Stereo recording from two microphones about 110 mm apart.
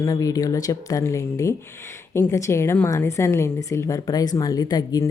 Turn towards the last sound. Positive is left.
turn(degrees=35)  # may be behind; listen again after turning